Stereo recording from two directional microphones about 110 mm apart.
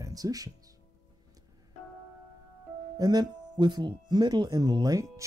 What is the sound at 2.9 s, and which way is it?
Speech, 35° right (ahead or behind).